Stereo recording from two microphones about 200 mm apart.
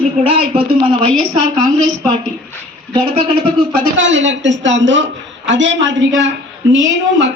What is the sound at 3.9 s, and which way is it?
A man's voice, 65° right (ahead or behind).